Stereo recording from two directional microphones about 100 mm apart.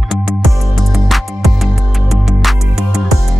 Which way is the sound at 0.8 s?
Centre (ahead or behind).